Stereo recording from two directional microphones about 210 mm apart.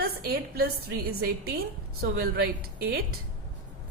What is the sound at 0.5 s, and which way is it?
A woman's voice, 45° right (ahead or behind).